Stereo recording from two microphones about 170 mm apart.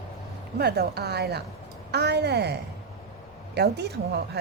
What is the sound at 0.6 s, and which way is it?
A woman's voice, 70° right (ahead or behind).